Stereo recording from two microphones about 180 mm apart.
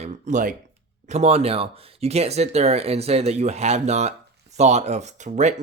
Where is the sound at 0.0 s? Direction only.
45° right (ahead or behind).